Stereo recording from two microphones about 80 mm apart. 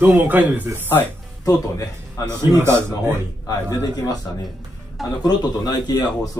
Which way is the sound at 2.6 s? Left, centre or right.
Right.